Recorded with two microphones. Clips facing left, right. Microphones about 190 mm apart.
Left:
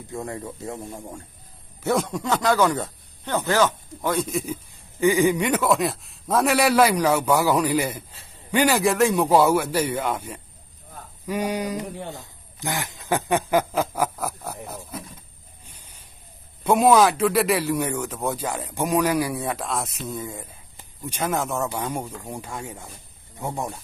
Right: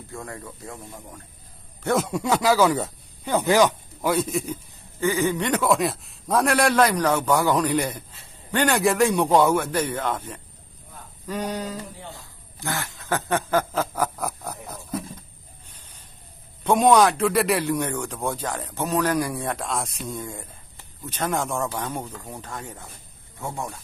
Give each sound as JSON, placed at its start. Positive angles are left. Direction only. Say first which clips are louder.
{"t": 0.1, "sound": "speech", "louder": "left 6 dB", "side_deg": 20}
{"t": 1.8, "sound": "speech", "louder": "even", "side_deg": 0}
{"t": 4.9, "sound": "a man's voice", "louder": "left 4 dB", "side_deg": 15}
{"t": 16.6, "sound": "a man's voice", "louder": "even", "side_deg": 5}